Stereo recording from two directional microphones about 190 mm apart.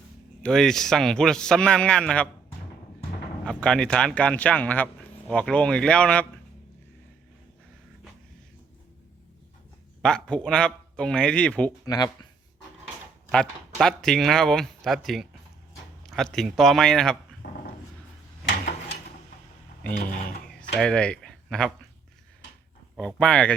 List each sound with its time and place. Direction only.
0.4 s speech: 5° left (ahead or behind)
3.4 s speech: 5° left (ahead or behind)
10.0 s speech: 5° left (ahead or behind)
11.9 s speech: 20° left (ahead or behind)
13.3 s speech: 5° left (ahead or behind)
17.4 s dog: 45° left (ahead or behind)
20.2 s a sound: 5° left (ahead or behind)
23.0 s speech: 5° left (ahead or behind)